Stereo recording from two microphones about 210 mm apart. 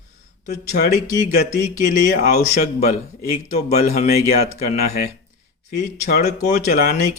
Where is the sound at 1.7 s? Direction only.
40° left (ahead or behind).